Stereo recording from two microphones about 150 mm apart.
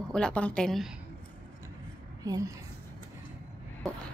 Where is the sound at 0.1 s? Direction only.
5° left (ahead or behind).